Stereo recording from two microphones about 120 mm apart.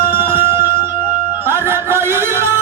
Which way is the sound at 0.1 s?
20° right (ahead or behind).